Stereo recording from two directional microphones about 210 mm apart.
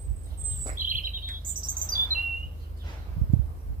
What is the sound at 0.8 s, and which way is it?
Bird, 40° right (ahead or behind).